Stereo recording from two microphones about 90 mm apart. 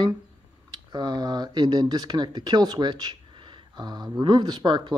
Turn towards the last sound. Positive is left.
turn(degrees=-55)  # may be behind; listen again after turning